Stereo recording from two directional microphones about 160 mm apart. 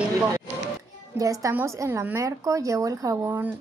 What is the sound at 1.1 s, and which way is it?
A woman's voice, 20° right (ahead or behind).